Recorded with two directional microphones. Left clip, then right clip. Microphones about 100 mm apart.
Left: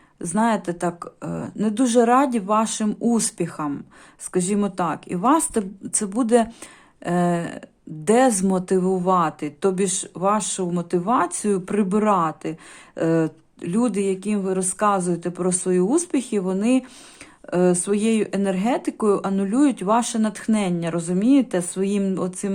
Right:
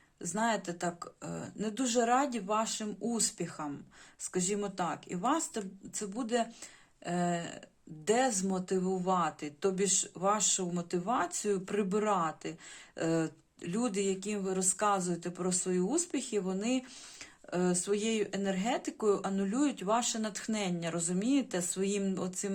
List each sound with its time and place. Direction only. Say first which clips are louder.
0.2 s speech: left 10 dB; 40° left (ahead or behind)
7.0 s speech: left 11 dB; 40° left (ahead or behind)